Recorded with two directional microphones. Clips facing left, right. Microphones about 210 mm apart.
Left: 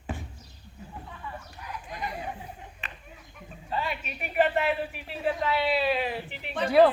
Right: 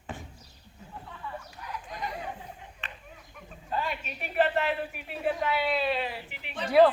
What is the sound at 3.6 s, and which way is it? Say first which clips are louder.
A man's voice: left 1 dB; 5° left (ahead or behind).